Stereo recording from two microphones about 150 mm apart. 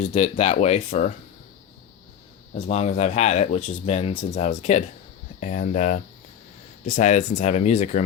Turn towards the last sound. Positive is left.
turn(degrees=50)  # may be behind; listen again after turning